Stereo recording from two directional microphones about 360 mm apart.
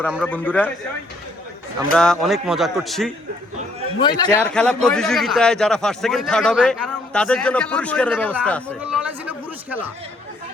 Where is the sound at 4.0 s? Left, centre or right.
Centre.